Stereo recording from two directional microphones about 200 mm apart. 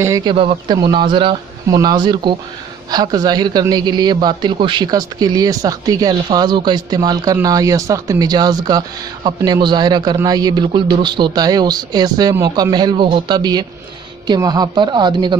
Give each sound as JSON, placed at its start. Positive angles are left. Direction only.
{"t": 0.0, "sound": "speech", "side_deg": -20}